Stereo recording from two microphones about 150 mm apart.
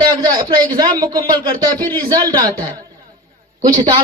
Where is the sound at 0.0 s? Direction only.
25° right (ahead or behind).